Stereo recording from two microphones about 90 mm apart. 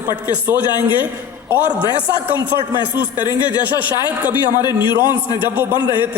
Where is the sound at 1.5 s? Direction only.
20° right (ahead or behind).